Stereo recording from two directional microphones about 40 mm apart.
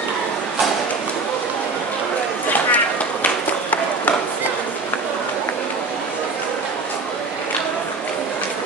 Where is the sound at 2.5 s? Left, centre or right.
Left.